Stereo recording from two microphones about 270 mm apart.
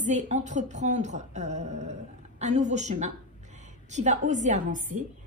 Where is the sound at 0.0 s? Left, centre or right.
Right.